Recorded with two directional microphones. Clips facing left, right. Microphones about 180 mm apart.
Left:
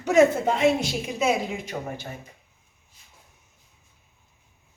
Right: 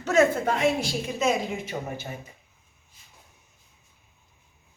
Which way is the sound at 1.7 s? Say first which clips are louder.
Left 2 dB; 5° right (ahead or behind).